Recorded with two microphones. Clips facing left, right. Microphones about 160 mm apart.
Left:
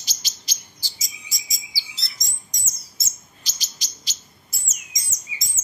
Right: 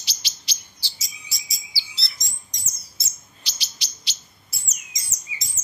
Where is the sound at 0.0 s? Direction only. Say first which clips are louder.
Even; 45° left (ahead or behind).